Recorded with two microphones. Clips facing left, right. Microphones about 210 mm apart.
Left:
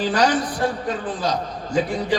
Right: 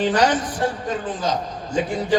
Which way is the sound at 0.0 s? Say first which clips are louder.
Right 1 dB; 35° left (ahead or behind).